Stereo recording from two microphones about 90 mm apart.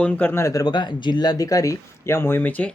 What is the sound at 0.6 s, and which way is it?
Speech, 55° left (ahead or behind).